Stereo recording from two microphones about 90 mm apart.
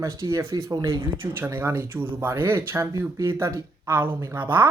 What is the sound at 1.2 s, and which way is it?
Speech, 25° right (ahead or behind).